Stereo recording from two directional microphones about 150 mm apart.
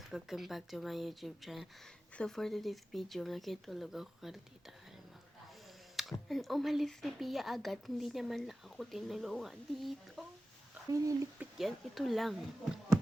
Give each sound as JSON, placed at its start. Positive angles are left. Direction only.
{"t": 0.1, "sound": "speech", "side_deg": 0}
{"t": 6.0, "sound": "speech", "side_deg": 0}
{"t": 10.9, "sound": "speech", "side_deg": -20}
{"t": 11.3, "sound": "speech", "side_deg": 0}